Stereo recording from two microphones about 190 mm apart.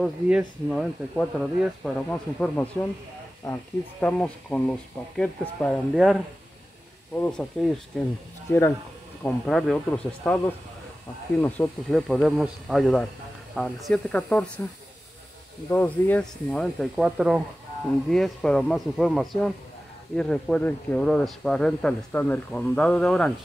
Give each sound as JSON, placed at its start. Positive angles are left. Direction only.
{"t": 0.0, "sound": "speech", "side_deg": 0}
{"t": 8.5, "sound": "speech", "side_deg": 10}